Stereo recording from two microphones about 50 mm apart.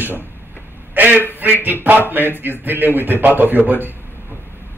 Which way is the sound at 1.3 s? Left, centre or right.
Right.